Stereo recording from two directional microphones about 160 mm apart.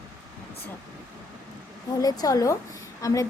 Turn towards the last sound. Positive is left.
turn(degrees=20)  # may be behind; listen again after turning